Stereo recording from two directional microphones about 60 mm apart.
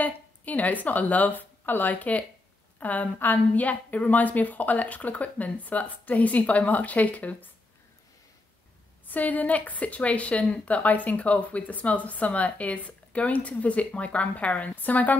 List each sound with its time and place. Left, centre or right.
0.0 s speech: left
9.0 s speech: left